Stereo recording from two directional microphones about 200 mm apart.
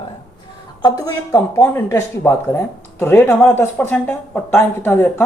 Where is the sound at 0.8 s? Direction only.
20° left (ahead or behind).